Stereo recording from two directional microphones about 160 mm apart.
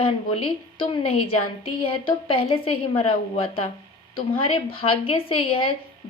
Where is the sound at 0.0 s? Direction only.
35° left (ahead or behind).